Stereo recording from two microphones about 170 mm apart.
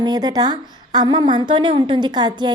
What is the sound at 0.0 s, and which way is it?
A woman's voice, 25° right (ahead or behind).